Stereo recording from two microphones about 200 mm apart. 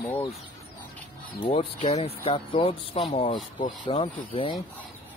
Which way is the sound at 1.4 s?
30° left (ahead or behind).